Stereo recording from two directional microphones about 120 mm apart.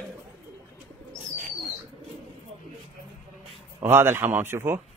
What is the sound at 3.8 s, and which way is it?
Speech, 20° right (ahead or behind).